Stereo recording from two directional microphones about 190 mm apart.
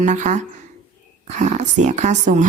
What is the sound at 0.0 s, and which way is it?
Speech, 40° right (ahead or behind).